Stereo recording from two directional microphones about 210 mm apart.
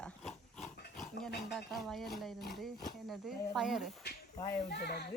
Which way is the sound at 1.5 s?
Centre (ahead or behind).